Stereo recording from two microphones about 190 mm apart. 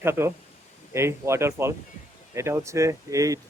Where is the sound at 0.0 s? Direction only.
10° right (ahead or behind).